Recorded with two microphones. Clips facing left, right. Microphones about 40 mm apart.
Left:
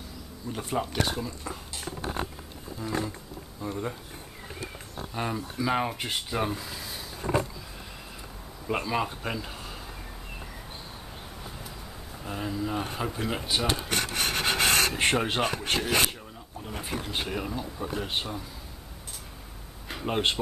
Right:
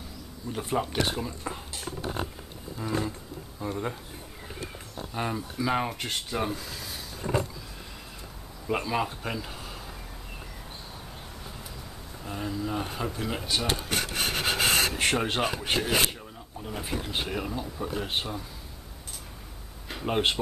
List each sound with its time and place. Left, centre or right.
0.5 s speech: centre
1.1 s speech: centre
3.6 s speech: centre
5.1 s speech: centre
8.6 s speech: centre
12.2 s speech: centre
14.1 s rub: centre
15.1 s speech: centre
19.9 s a sound: centre